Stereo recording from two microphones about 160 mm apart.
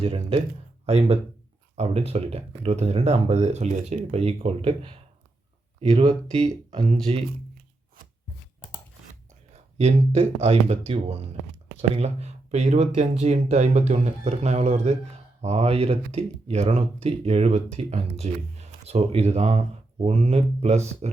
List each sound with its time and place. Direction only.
0.0 s speech: 40° right (ahead or behind)
9.5 s a sound: 40° right (ahead or behind)
10.4 s speech: 40° right (ahead or behind)